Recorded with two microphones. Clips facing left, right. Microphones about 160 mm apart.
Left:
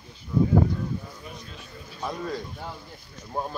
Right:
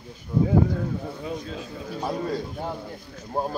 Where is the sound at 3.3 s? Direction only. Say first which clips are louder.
Right 4 dB; 35° right (ahead or behind).